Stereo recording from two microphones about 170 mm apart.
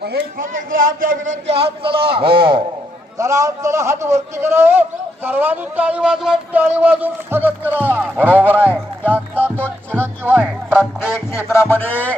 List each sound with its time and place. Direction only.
0.0 s speech: 65° right (ahead or behind)
1.1 s speech: 90° right
1.5 s a man's voice: 35° right (ahead or behind)
3.2 s a man's voice: 20° right (ahead or behind)
9.4 s music: 10° right (ahead or behind)
11.3 s music: 15° left (ahead or behind)